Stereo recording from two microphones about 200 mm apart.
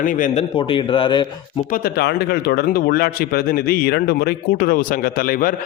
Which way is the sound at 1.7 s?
50° left (ahead or behind).